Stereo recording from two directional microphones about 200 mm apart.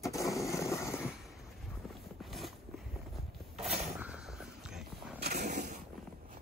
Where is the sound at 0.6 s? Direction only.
15° left (ahead or behind).